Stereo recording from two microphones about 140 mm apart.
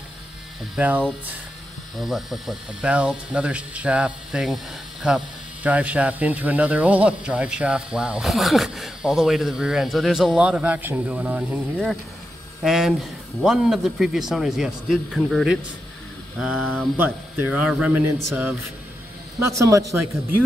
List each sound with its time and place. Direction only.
0.7 s speech: 10° right (ahead or behind)
11.7 s speech: centre (ahead or behind)
16.9 s a man's voice: 15° right (ahead or behind)